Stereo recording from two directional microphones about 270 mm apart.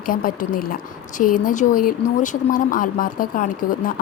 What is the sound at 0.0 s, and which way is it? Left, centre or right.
A woman's voice, left.